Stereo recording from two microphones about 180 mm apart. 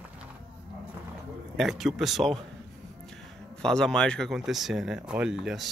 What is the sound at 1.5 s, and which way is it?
Speech, centre (ahead or behind).